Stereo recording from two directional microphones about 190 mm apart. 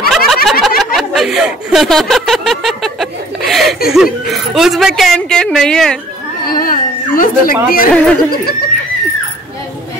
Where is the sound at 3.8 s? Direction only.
Centre (ahead or behind).